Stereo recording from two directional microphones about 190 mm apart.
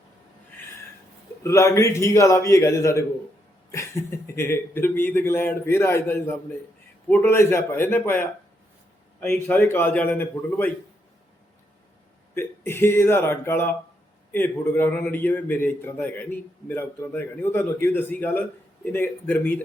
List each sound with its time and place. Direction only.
1.5 s speech: 15° left (ahead or behind)
9.3 s speech: 10° left (ahead or behind)
12.3 s speech: 10° left (ahead or behind)